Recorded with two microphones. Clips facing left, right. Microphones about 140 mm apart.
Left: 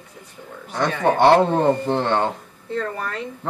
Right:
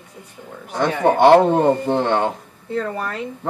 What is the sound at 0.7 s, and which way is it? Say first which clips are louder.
Speech: right 2 dB; 15° right (ahead or behind).